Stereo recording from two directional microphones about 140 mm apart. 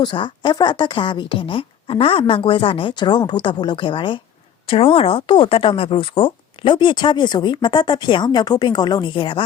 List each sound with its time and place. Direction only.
0.0 s a woman's voice: 35° left (ahead or behind)